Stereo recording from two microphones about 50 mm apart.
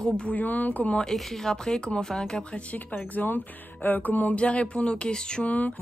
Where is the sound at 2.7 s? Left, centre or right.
Left.